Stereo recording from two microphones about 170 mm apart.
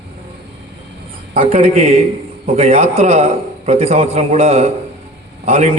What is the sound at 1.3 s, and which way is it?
A man's voice, 35° right (ahead or behind).